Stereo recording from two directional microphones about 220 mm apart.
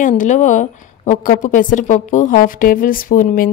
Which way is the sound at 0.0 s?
35° left (ahead or behind).